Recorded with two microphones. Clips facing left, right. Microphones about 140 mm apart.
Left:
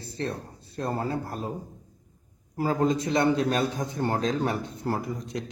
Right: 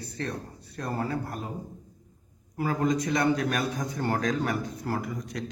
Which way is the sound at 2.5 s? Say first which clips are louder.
Left 2 dB; 30° left (ahead or behind).